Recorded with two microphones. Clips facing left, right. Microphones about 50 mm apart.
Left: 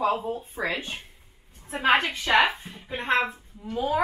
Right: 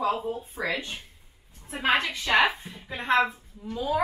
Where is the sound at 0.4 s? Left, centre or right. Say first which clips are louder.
Left 1 dB; left.